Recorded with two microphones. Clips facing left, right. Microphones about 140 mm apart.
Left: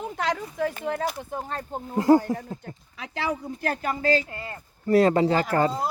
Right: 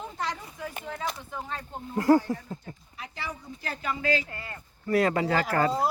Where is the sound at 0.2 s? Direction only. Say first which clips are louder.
Left 9 dB; 85° left.